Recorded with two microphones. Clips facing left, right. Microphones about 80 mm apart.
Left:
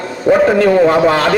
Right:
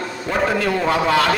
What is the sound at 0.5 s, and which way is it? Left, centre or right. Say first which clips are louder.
Speech: left 9 dB; left.